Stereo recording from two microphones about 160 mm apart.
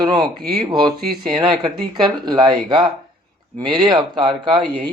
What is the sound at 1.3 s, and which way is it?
Speech, 30° right (ahead or behind).